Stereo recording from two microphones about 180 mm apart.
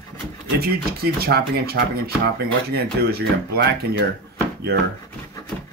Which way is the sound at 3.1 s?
65° right (ahead or behind).